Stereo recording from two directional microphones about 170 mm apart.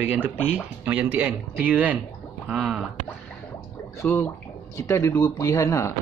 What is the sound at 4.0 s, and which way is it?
Speech, 15° left (ahead or behind).